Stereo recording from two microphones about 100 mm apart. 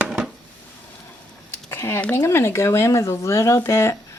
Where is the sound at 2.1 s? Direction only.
25° left (ahead or behind).